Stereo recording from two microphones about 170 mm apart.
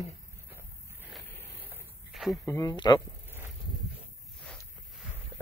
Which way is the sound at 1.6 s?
5° right (ahead or behind).